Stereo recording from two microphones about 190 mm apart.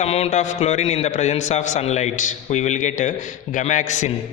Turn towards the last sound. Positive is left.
turn(degrees=40)  # may be behind; listen again after turning